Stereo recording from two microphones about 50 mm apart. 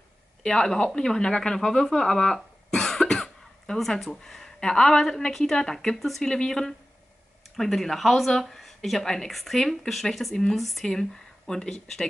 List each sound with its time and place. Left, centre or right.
0.4 s speech: centre
5.9 s speech: centre
6.2 s speech: centre